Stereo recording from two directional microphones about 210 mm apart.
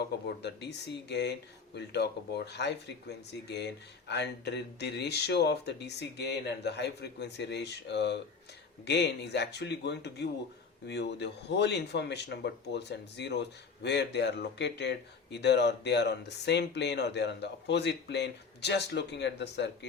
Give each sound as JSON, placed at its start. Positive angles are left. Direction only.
{"t": 0.3, "sound": "speech", "side_deg": 55}